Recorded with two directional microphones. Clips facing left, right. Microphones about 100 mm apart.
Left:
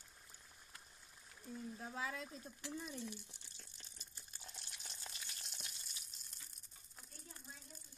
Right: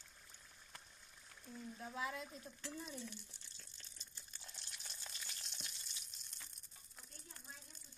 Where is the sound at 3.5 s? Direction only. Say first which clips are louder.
Left 1 dB; 15° left (ahead or behind).